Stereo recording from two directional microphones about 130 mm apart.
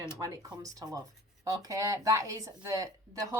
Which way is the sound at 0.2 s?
25° right (ahead or behind).